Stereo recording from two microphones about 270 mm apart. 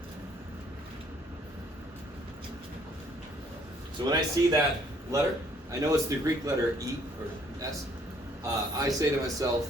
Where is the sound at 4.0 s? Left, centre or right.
Centre.